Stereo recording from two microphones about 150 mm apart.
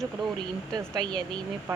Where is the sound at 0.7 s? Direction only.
25° right (ahead or behind).